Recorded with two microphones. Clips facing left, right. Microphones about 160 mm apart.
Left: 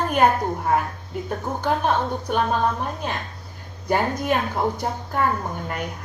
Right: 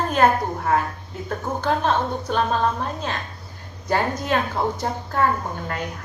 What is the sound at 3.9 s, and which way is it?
A woman's voice, 15° left (ahead or behind).